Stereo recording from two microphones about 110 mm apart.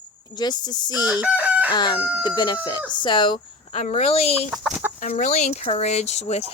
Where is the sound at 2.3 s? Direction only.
45° left (ahead or behind).